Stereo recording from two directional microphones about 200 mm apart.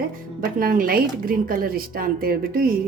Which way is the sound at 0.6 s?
45° right (ahead or behind).